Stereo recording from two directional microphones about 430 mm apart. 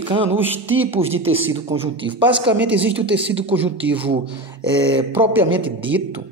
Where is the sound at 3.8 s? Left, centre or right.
Centre.